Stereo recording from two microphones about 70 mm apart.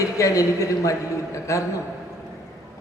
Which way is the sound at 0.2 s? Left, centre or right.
Left.